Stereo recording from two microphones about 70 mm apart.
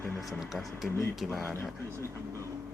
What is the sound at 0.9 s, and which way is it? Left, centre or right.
Speech, left.